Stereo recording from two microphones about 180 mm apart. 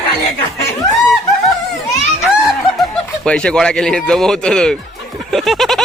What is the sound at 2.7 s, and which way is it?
Speech, 5° left (ahead or behind).